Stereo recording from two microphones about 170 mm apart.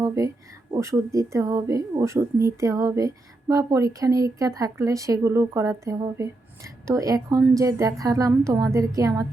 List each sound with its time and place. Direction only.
0.0 s a woman's voice: 20° right (ahead or behind)